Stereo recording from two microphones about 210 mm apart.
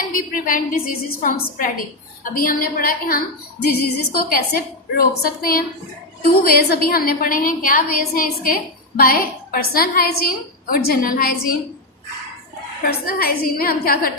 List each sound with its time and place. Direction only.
0.1 s a woman's voice: 40° left (ahead or behind)
12.8 s a woman's voice: 45° left (ahead or behind)